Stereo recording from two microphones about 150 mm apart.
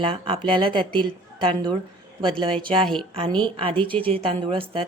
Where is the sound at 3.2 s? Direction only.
35° right (ahead or behind).